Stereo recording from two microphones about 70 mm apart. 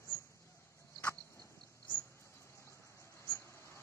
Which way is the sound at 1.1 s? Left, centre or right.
Left.